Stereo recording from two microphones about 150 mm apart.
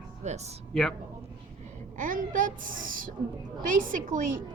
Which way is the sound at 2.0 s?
65° right (ahead or behind).